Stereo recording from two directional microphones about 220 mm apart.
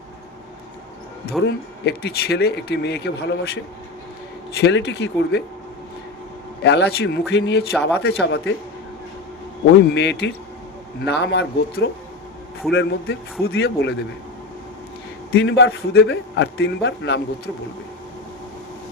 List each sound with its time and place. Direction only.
1.5 s speech: 50° left (ahead or behind)
4.6 s speech: 50° left (ahead or behind)
6.6 s speech: 50° left (ahead or behind)
9.9 s speech: 50° left (ahead or behind)
15.3 s speech: 50° left (ahead or behind)